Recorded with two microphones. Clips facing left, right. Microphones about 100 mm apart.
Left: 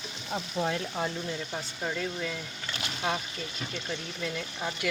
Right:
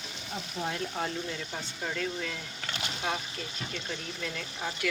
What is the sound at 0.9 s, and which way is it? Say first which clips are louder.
Speech: left 1 dB; 15° left (ahead or behind).